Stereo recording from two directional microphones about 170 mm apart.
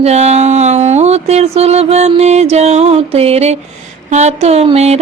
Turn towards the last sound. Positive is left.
turn(degrees=-40)  # may be behind; listen again after turning